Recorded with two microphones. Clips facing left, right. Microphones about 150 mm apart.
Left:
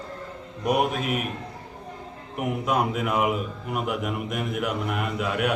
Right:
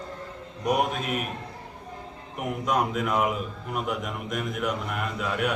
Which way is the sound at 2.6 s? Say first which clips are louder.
Even; 5° left (ahead or behind).